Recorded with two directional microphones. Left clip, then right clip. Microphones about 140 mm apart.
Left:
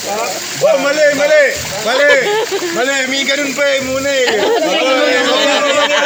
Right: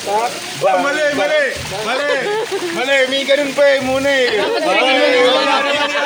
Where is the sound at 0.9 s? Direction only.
20° left (ahead or behind).